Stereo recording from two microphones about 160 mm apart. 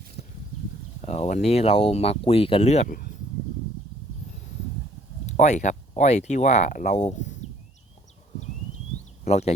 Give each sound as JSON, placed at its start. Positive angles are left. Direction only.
{"t": 1.0, "sound": "speech", "side_deg": 40}
{"t": 5.2, "sound": "a sound", "side_deg": 45}
{"t": 6.0, "sound": "speech", "side_deg": 45}
{"t": 9.2, "sound": "speech", "side_deg": 40}